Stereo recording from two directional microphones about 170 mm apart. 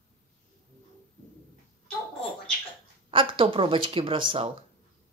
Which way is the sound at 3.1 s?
30° right (ahead or behind).